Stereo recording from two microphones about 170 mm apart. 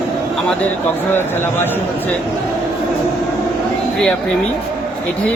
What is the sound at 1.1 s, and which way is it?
Speech, 15° left (ahead or behind).